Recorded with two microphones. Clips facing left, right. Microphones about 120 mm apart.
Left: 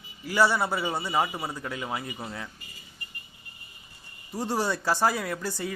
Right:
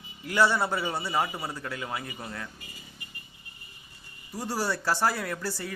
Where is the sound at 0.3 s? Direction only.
10° left (ahead or behind).